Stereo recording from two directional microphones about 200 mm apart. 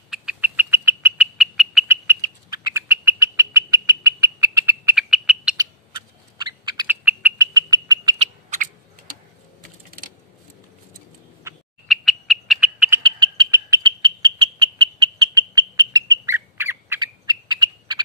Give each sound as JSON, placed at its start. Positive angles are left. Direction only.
{"t": 0.1, "sound": "bird", "side_deg": -5}
{"t": 2.0, "sound": "bird", "side_deg": -15}
{"t": 5.6, "sound": "a sound", "side_deg": -20}
{"t": 6.6, "sound": "owl", "side_deg": -20}
{"t": 6.9, "sound": "bird", "side_deg": -10}
{"t": 7.5, "sound": "frog", "side_deg": -20}
{"t": 8.2, "sound": "owl", "side_deg": -40}
{"t": 11.9, "sound": "frog", "side_deg": 0}
{"t": 13.0, "sound": "frog", "side_deg": -25}